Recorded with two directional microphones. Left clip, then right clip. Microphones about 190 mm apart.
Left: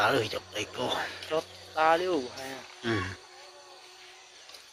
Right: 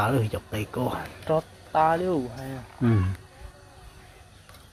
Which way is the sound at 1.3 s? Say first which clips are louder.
Right 6 dB; 30° right (ahead or behind).